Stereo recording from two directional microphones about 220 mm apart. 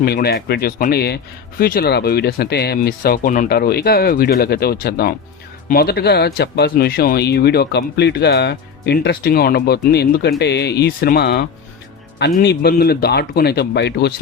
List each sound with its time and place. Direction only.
0.0 s speech: 45° left (ahead or behind)